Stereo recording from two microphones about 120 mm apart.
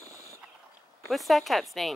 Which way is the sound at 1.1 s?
Centre (ahead or behind).